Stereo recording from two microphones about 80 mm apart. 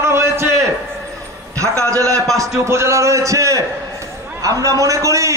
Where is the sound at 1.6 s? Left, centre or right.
Right.